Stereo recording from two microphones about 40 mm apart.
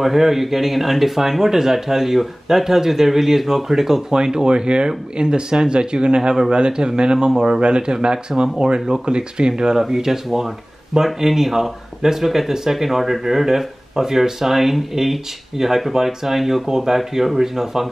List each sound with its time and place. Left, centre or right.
0.0 s speech: centre